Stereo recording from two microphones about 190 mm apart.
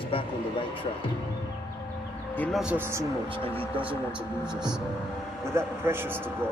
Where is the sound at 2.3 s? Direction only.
10° left (ahead or behind).